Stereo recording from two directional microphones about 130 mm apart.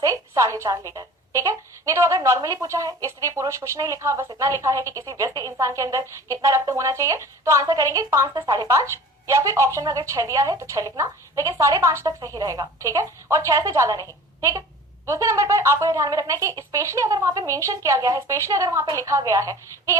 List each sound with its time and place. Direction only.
0.0 s a woman's voice: 25° right (ahead or behind)